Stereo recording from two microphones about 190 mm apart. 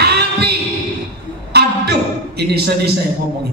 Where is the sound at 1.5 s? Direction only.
60° right (ahead or behind).